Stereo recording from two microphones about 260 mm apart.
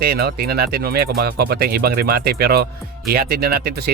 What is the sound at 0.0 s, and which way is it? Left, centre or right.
Speech, right.